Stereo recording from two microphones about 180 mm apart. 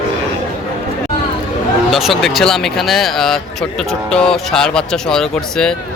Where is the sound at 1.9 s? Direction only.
Centre (ahead or behind).